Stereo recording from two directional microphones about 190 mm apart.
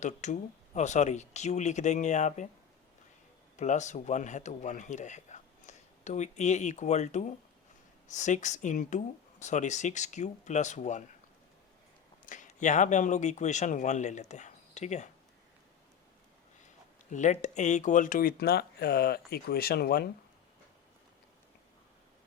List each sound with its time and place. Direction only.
0.0 s speech: 40° left (ahead or behind)
3.6 s speech: 40° left (ahead or behind)
12.2 s speech: 45° left (ahead or behind)
17.1 s speech: 40° left (ahead or behind)